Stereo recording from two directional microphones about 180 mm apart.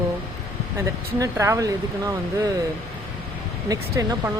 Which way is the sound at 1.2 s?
15° right (ahead or behind).